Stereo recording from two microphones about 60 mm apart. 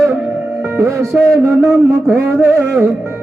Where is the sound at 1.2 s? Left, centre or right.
Right.